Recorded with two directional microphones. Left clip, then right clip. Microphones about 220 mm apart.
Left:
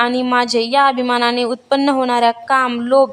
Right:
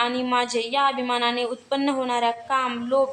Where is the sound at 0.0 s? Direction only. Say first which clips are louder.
Left 7 dB; 40° left (ahead or behind).